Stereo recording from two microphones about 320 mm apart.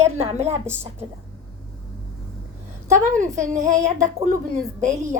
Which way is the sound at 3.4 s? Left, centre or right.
Right.